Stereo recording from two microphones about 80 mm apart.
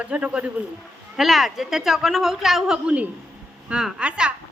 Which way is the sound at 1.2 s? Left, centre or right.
Centre.